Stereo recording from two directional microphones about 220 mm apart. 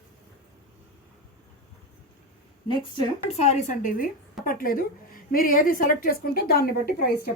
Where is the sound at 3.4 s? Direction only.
30° left (ahead or behind).